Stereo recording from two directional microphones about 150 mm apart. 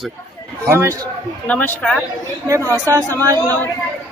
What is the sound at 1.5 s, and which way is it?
Speech, 10° left (ahead or behind).